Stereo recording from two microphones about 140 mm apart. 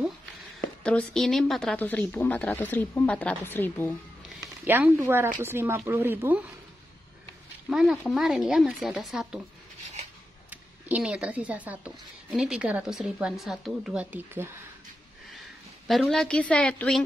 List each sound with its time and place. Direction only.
0.8 s speech: 5° left (ahead or behind)
1.8 s speech: 15° left (ahead or behind)
4.6 s speech: 15° right (ahead or behind)
7.7 s speech: centre (ahead or behind)
10.5 s speech: 10° right (ahead or behind)
15.9 s speech: centre (ahead or behind)